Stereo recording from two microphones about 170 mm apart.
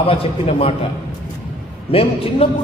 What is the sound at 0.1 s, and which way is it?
Speech, 35° left (ahead or behind).